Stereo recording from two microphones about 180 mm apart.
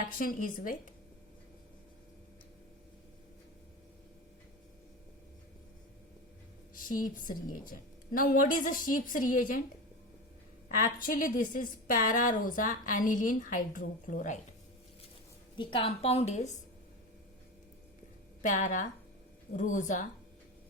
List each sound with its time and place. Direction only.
0.0 s a woman's voice: 50° left (ahead or behind)
6.7 s a woman's voice: 50° left (ahead or behind)
10.8 s a woman's voice: 50° left (ahead or behind)
15.5 s a woman's voice: 30° left (ahead or behind)
18.4 s a woman's voice: 45° left (ahead or behind)